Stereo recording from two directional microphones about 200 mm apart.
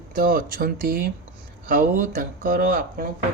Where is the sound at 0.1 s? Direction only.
45° right (ahead or behind).